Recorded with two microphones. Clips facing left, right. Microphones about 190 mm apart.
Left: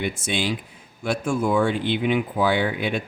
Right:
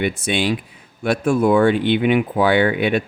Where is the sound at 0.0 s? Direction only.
65° right (ahead or behind).